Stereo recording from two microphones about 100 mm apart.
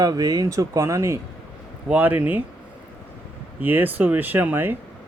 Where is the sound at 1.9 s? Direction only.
20° right (ahead or behind).